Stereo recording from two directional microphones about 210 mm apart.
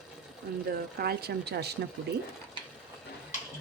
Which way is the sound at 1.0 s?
50° right (ahead or behind).